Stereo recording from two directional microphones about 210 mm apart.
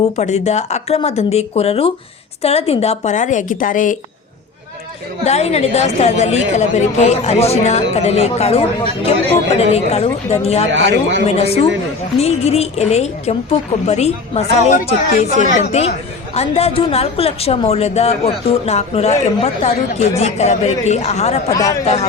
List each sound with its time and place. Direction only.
0.2 s speech: 30° left (ahead or behind)
5.2 s speech: 30° left (ahead or behind)
10.7 s a man's voice: 60° right (ahead or behind)
11.3 s speech: 30° left (ahead or behind)
21.5 s speech: 15° left (ahead or behind)